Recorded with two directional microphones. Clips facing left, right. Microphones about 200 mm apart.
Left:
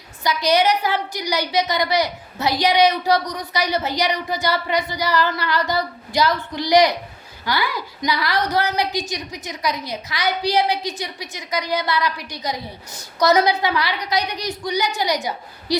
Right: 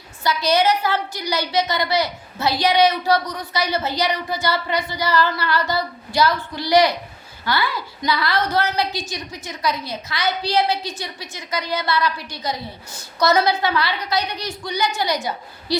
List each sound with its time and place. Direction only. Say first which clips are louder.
0.2 s a woman's voice: left 1 dB; 15° left (ahead or behind)